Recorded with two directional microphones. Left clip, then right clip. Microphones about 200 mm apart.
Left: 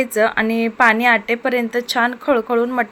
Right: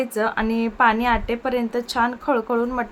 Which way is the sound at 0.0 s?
10° left (ahead or behind).